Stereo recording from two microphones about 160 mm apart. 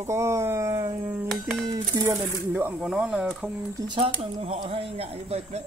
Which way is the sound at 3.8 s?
30° right (ahead or behind).